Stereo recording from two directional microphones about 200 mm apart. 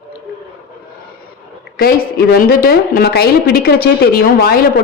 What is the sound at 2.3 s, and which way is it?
Speech, 50° left (ahead or behind).